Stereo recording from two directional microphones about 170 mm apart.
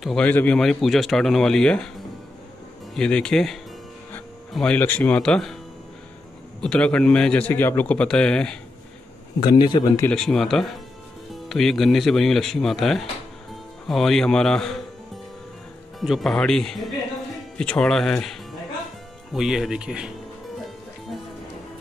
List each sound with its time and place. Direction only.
0.0 s a man's voice: 5° left (ahead or behind)
2.9 s a man's voice: 5° left (ahead or behind)
6.6 s a man's voice: 5° left (ahead or behind)
9.4 s speech: 30° left (ahead or behind)
10.1 s a man's voice: 5° left (ahead or behind)
16.0 s a man's voice: centre (ahead or behind)
19.3 s a man's voice: centre (ahead or behind)